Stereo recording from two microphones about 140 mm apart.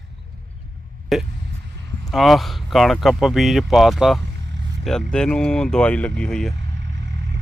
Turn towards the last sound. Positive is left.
turn(degrees=5)  # may be behind; listen again after turning